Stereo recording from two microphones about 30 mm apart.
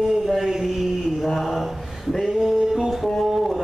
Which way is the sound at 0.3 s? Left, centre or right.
Centre.